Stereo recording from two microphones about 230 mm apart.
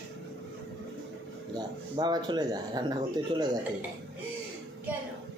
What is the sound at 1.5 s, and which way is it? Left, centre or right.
Speech, centre.